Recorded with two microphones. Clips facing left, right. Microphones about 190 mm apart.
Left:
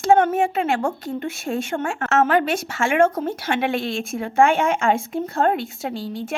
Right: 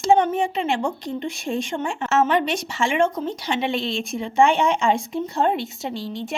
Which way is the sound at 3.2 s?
55° left (ahead or behind).